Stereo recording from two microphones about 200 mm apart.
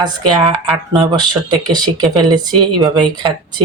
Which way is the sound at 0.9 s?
20° right (ahead or behind).